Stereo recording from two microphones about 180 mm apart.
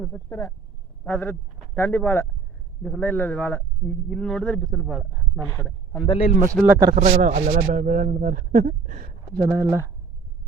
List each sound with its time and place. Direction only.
0.0 s a man's voice: 10° left (ahead or behind)
5.4 s speech: 15° left (ahead or behind)
6.0 s a man's voice: 30° left (ahead or behind)
6.6 s speech: 15° right (ahead or behind)
6.9 s speech: 45° right (ahead or behind)
9.4 s speech: 15° right (ahead or behind)